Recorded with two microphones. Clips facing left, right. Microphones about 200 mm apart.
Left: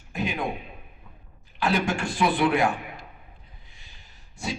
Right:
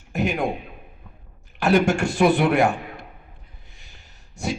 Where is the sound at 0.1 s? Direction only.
45° right (ahead or behind).